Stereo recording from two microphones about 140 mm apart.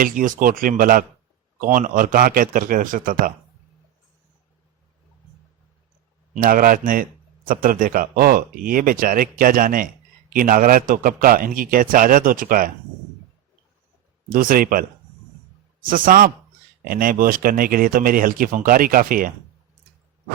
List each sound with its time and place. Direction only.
0.0 s a man's voice: 80° right
1.6 s a man's voice: 75° right (ahead or behind)
6.3 s a man's voice: 85° right
14.3 s speech: 90° right
15.9 s a man's voice: 85° right